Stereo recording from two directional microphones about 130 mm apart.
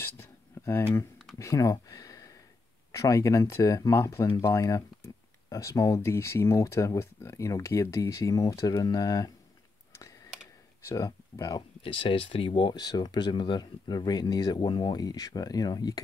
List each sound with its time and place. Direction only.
0.0 s a sound: 20° left (ahead or behind)
1.4 s speech: 25° left (ahead or behind)
10.9 s speech: 30° left (ahead or behind)
11.8 s speech: 40° left (ahead or behind)